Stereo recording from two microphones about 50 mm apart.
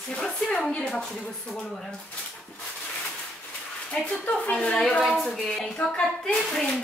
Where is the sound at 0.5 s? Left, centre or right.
Centre.